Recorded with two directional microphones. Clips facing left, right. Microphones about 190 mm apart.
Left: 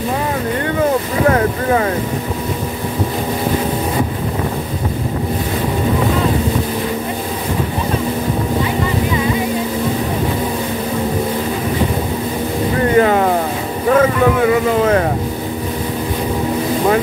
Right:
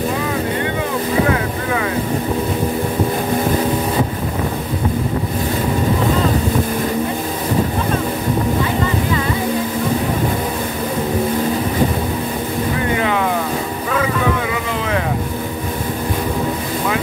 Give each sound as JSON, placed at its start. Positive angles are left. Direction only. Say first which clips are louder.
{"t": 1.3, "sound": "boat", "louder": "left 5 dB", "side_deg": 40}
{"t": 12.9, "sound": "boat", "louder": "left 7 dB", "side_deg": 45}